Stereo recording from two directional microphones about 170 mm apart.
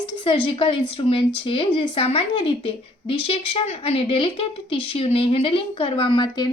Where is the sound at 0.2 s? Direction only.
30° left (ahead or behind).